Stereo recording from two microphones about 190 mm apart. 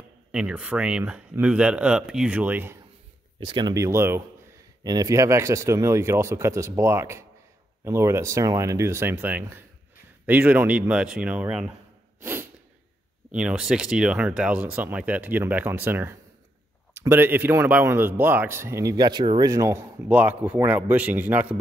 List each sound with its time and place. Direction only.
0.3 s speech: 5° right (ahead or behind)
3.3 s speech: 25° right (ahead or behind); by 11.7 s 5° right (ahead or behind)
12.2 s sneeze: 10° right (ahead or behind)
13.3 s speech: 5° right (ahead or behind)